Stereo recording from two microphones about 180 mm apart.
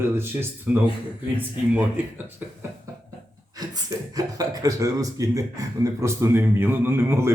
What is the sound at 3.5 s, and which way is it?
Speech, 20° right (ahead or behind).